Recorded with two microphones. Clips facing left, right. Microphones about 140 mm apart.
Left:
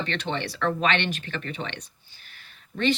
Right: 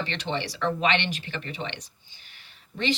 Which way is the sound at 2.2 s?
15° right (ahead or behind).